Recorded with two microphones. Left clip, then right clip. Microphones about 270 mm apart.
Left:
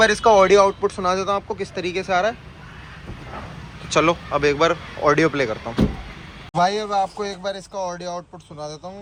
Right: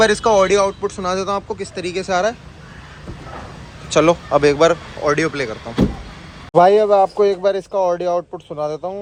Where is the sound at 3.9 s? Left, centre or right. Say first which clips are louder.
Right 5 dB; centre.